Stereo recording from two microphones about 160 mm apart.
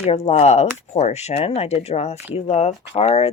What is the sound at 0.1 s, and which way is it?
Speech, 40° left (ahead or behind).